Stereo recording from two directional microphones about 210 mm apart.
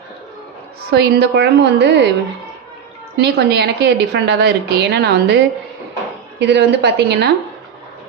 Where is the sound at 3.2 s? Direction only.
50° right (ahead or behind).